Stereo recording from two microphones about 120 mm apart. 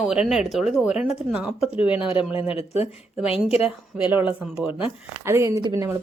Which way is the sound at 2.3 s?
55° left (ahead or behind).